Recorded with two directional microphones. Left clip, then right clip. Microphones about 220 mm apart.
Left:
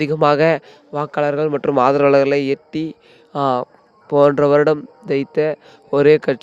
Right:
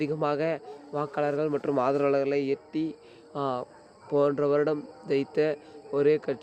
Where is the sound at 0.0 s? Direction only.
45° left (ahead or behind).